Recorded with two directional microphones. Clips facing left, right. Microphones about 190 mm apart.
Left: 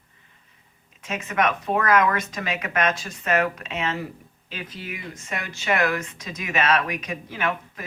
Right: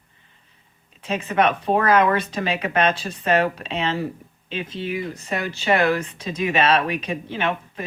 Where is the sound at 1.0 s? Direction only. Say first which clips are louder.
Right 4 dB; 30° right (ahead or behind).